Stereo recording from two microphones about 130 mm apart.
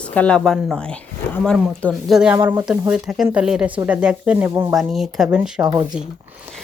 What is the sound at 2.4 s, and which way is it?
Speech, 15° right (ahead or behind).